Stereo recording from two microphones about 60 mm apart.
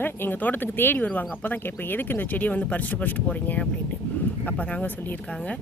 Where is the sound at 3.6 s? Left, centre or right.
Centre.